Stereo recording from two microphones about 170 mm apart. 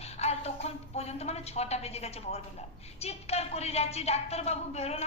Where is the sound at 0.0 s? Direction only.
40° left (ahead or behind).